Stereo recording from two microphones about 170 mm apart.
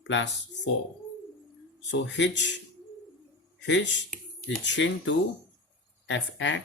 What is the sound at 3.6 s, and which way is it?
Speech, 90° left.